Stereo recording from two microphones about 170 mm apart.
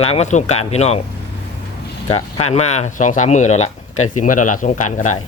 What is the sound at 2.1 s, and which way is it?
Speech, 40° left (ahead or behind).